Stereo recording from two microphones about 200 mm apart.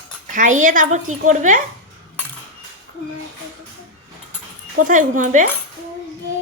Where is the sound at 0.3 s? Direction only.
40° right (ahead or behind).